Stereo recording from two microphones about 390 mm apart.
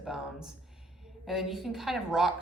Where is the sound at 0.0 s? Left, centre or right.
Centre.